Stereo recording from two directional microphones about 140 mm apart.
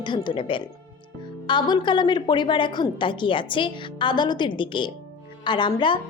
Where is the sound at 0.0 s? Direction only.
35° left (ahead or behind).